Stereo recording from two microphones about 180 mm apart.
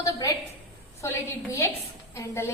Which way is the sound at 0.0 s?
20° left (ahead or behind).